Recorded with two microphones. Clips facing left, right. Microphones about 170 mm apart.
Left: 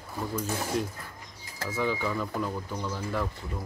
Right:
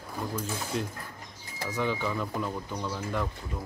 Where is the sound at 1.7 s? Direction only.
5° left (ahead or behind).